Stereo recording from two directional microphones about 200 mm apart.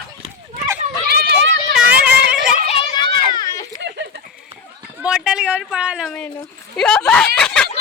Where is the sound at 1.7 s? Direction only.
5° right (ahead or behind).